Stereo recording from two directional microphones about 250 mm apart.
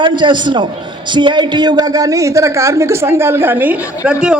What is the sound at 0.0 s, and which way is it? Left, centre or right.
A man's voice, centre.